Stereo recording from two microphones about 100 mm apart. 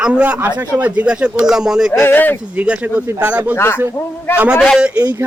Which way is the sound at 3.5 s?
25° left (ahead or behind).